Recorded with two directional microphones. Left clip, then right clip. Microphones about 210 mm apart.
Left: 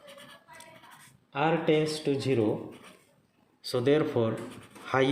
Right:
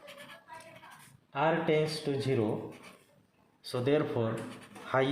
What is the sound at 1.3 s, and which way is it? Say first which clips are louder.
Speech: left 2 dB; 40° left (ahead or behind).